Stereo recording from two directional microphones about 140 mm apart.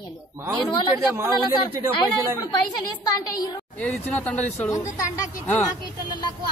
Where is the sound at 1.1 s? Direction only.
20° right (ahead or behind).